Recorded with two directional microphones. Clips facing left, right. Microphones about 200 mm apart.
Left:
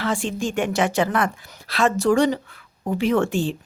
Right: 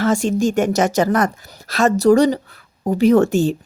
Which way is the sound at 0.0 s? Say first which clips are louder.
Right 8 dB; 45° right (ahead or behind).